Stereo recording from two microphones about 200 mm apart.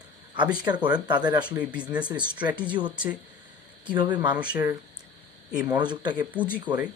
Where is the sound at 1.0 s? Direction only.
20° right (ahead or behind).